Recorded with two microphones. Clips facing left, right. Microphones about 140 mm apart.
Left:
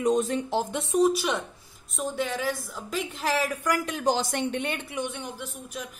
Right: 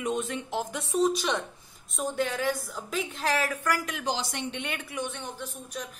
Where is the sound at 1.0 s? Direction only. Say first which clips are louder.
Left 2 dB; 10° left (ahead or behind).